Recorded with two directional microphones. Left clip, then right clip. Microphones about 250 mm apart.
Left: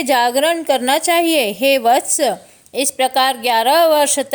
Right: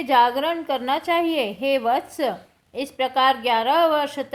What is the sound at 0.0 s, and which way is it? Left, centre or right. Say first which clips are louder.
A woman's voice: left 4 dB; left.